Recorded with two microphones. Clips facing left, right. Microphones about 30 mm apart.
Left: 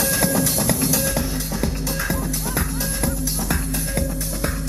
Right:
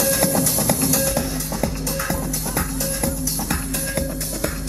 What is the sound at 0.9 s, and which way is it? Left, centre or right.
Music, centre.